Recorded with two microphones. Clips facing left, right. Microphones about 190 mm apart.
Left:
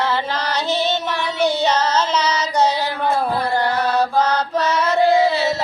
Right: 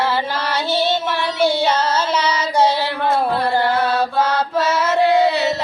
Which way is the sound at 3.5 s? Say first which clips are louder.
Right 2 dB; 10° right (ahead or behind).